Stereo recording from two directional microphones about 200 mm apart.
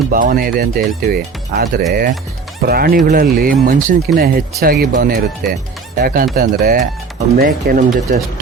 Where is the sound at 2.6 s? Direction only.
50° right (ahead or behind).